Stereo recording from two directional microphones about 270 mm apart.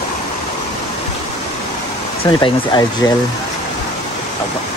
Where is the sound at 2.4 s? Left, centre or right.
Centre.